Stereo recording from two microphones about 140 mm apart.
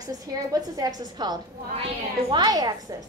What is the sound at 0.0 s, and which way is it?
A woman's voice, 25° right (ahead or behind).